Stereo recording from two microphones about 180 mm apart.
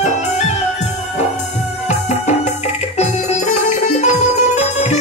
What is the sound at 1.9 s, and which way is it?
Music, 40° left (ahead or behind).